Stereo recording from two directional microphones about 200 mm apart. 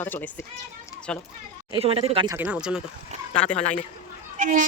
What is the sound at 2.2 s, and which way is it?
Speech, 5° right (ahead or behind).